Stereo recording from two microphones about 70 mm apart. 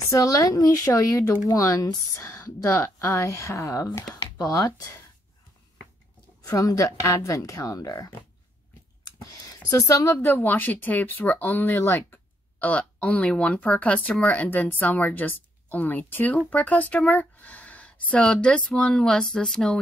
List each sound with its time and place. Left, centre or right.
0.1 s a woman's voice: left
6.4 s a woman's voice: left
9.0 s a sound: left
10.2 s speech: left
12.5 s speech: left